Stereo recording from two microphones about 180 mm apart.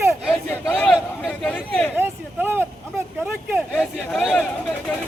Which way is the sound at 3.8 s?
Centre (ahead or behind).